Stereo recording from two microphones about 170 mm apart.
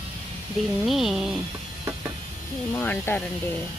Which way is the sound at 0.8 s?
Centre (ahead or behind).